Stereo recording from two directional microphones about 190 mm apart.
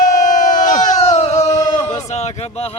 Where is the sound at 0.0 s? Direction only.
45° left (ahead or behind).